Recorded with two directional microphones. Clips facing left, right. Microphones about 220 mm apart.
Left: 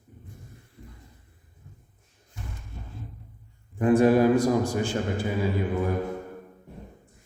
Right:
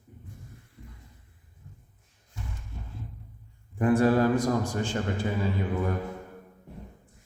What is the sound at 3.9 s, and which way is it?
A man's voice, 15° left (ahead or behind).